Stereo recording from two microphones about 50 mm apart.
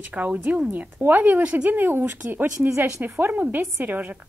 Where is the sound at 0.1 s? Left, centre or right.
Right.